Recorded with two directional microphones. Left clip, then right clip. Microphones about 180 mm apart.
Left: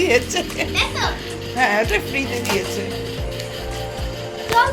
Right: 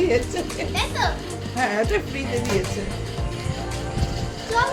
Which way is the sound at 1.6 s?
10° right (ahead or behind).